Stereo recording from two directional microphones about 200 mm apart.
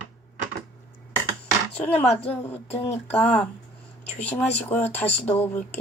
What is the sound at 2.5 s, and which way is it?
Speech, 10° left (ahead or behind).